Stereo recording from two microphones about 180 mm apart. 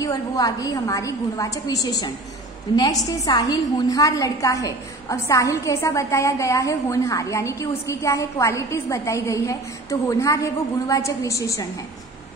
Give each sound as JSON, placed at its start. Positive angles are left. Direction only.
{"t": 0.0, "sound": "a woman's voice", "side_deg": 20}